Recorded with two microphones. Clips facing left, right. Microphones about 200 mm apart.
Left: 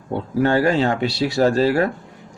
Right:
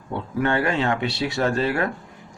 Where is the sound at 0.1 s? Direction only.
35° left (ahead or behind).